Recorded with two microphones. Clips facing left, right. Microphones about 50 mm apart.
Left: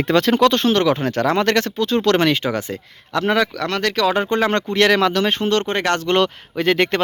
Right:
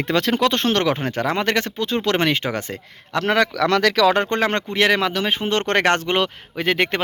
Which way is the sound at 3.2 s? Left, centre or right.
Right.